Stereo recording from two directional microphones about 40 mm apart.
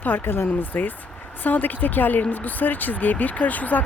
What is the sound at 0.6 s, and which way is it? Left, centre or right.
Speech, left.